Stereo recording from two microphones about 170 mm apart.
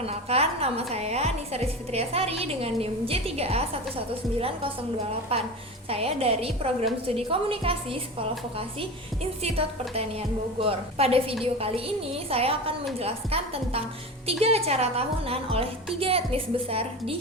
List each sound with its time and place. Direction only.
0.0 s a woman's voice: 35° right (ahead or behind)
9.4 s a woman's voice: 35° right (ahead or behind)